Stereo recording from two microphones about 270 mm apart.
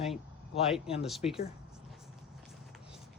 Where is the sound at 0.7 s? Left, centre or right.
Centre.